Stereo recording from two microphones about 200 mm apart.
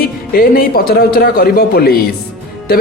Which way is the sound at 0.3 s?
50° left (ahead or behind).